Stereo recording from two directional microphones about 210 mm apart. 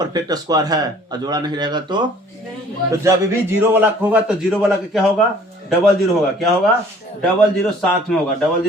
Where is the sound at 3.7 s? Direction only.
10° right (ahead or behind).